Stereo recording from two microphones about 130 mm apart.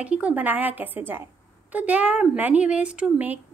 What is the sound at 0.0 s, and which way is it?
A woman's voice, 10° right (ahead or behind).